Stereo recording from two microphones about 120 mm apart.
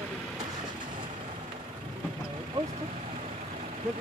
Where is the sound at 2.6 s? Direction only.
35° right (ahead or behind).